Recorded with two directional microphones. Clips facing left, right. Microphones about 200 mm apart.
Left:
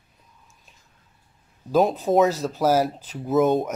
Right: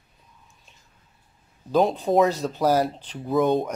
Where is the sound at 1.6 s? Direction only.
5° left (ahead or behind).